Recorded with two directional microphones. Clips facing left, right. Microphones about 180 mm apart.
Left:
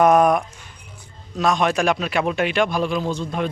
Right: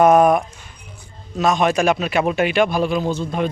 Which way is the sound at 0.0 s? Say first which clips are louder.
Right 2 dB; centre (ahead or behind).